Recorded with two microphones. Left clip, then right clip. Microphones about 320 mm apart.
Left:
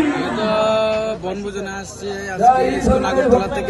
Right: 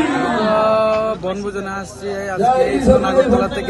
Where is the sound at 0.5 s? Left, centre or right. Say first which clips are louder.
Right 2 dB; centre.